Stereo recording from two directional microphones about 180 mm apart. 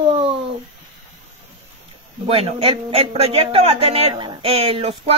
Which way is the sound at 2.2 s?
35° right (ahead or behind).